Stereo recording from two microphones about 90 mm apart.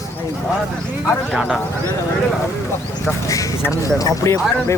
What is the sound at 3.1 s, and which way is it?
Speech, 35° left (ahead or behind).